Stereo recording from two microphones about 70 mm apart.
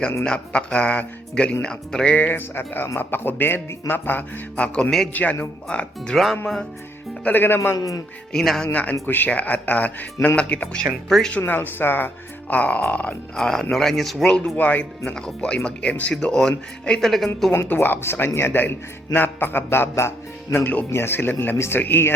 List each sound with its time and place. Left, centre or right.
0.3 s speech: centre
2.1 s speech: left
5.6 s speech: centre
7.3 s speech: left
8.3 s speech: centre
8.6 s speech: left
13.3 s speech: centre
14.5 s speech: left
17.1 s speech: centre
17.5 s speech: left